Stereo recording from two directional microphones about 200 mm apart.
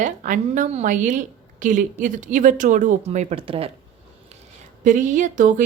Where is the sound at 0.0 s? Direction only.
40° right (ahead or behind).